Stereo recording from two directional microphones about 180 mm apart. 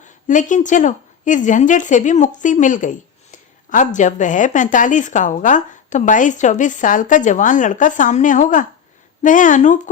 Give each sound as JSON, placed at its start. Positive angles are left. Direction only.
{"t": 0.0, "sound": "speech", "side_deg": 45}